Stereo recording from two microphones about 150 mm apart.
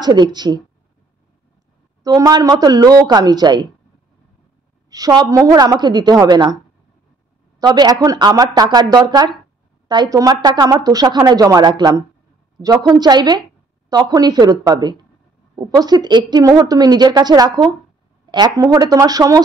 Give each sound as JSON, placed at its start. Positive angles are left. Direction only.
{"t": 0.0, "sound": "a woman's voice", "side_deg": -30}
{"t": 2.0, "sound": "a woman's voice", "side_deg": -25}
{"t": 4.8, "sound": "a woman's voice", "side_deg": -25}
{"t": 7.6, "sound": "a woman's voice", "side_deg": -25}